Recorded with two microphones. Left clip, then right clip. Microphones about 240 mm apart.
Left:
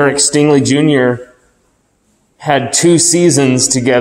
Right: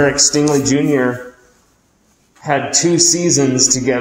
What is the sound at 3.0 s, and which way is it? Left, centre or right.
Speech, left.